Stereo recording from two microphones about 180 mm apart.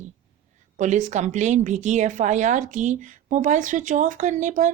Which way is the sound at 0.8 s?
45° right (ahead or behind).